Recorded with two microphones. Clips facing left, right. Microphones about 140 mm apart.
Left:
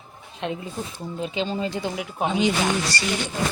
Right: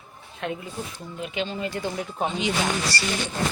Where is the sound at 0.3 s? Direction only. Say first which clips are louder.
Left 2 dB; 25° left (ahead or behind).